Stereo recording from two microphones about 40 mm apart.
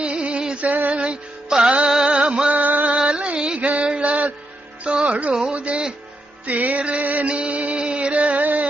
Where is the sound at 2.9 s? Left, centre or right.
Right.